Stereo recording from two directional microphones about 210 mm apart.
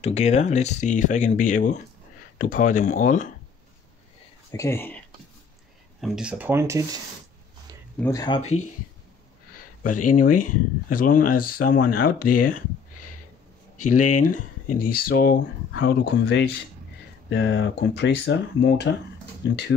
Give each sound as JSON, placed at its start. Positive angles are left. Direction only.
{"t": 0.0, "sound": "speech", "side_deg": 30}
{"t": 4.5, "sound": "speech", "side_deg": 15}
{"t": 5.9, "sound": "speech", "side_deg": 0}
{"t": 8.0, "sound": "speech", "side_deg": 15}
{"t": 8.4, "sound": "speech", "side_deg": 30}
{"t": 10.0, "sound": "speech", "side_deg": 40}
{"t": 13.9, "sound": "speech", "side_deg": 90}
{"t": 14.2, "sound": "speech", "side_deg": 40}